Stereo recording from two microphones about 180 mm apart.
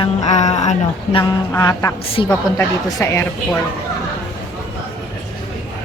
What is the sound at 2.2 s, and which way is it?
Speech, 30° left (ahead or behind).